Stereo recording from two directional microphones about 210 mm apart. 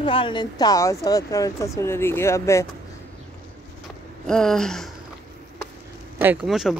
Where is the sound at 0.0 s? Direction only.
25° left (ahead or behind).